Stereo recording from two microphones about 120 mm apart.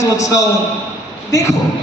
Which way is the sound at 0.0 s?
25° left (ahead or behind).